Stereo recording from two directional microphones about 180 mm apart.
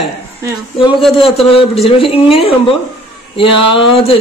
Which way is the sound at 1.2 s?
30° left (ahead or behind).